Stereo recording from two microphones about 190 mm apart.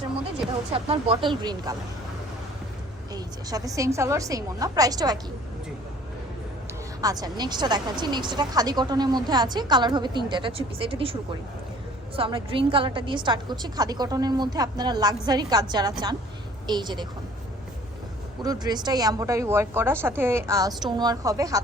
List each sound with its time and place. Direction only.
0.7 s speech: 30° right (ahead or behind)
3.1 s speech: 20° right (ahead or behind)
7.0 s speech: 20° right (ahead or behind)
18.4 s a woman's voice: 20° right (ahead or behind)